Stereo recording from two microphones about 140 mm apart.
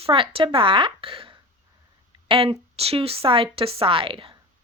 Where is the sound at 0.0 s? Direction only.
40° right (ahead or behind).